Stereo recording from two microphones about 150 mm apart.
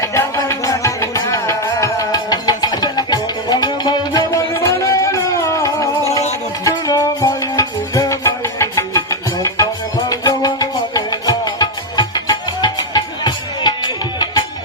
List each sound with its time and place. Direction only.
0.0 s music: 20° left (ahead or behind)